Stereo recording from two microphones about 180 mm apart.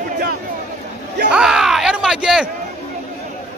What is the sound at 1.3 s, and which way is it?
Speech, 5° right (ahead or behind).